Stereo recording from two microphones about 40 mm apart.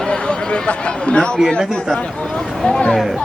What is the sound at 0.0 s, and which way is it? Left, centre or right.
Speech, left.